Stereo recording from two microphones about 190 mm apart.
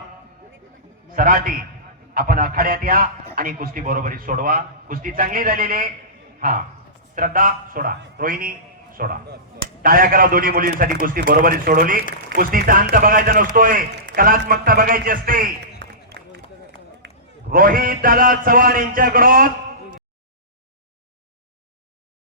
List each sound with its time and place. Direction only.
1.1 s a man's voice: 50° right (ahead or behind); by 16.4 s 65° right (ahead or behind)
17.5 s a man's voice: 50° right (ahead or behind)